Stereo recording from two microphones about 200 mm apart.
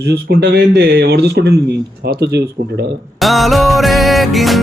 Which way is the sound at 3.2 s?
Centre (ahead or behind).